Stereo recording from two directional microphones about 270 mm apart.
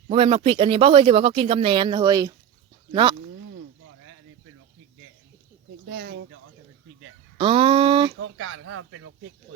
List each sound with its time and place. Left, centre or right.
0.1 s speech: right
5.9 s speech: right
7.3 s speech: centre
8.2 s speech: right